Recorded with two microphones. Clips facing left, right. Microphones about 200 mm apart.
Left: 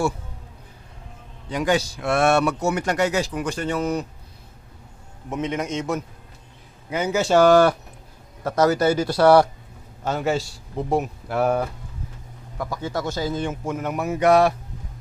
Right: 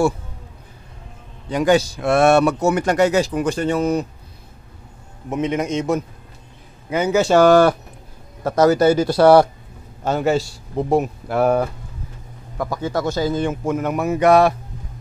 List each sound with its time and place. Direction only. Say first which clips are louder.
1.5 s speech: right 6 dB; 40° right (ahead or behind)
2.6 s speech: right 5 dB; 50° right (ahead or behind); by 4.0 s 30° right (ahead or behind)
5.3 s a man's voice: right 5 dB; 15° right (ahead or behind)
6.9 s speech: right 4 dB; 70° right (ahead or behind)
8.5 s a man's voice: right 5 dB; 25° right (ahead or behind)
10.1 s speech: right 5 dB; 60° right (ahead or behind)
13.0 s speech: right 6 dB; 60° right (ahead or behind)